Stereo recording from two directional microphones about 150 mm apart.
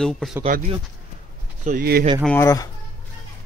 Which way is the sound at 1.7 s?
85° right.